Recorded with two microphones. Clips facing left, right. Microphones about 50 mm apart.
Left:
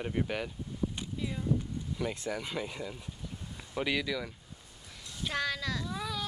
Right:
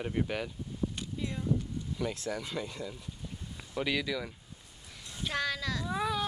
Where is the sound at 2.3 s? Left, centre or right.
Centre.